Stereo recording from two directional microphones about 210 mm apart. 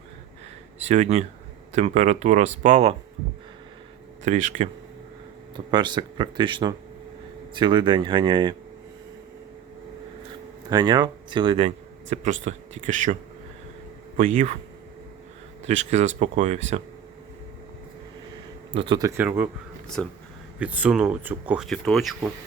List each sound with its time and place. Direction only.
0.9 s speech: 30° right (ahead or behind)
4.2 s speech: 35° right (ahead or behind)
5.5 s speech: 20° right (ahead or behind)
10.7 s speech: 20° right (ahead or behind); by 13.1 s 35° right (ahead or behind)
14.2 s speech: 35° right (ahead or behind)
15.6 s speech: 35° right (ahead or behind)
18.7 s speech: 25° right (ahead or behind); by 19.5 s 10° right (ahead or behind)
20.0 s speech: 5° left (ahead or behind)
20.6 s speech: 5° right (ahead or behind)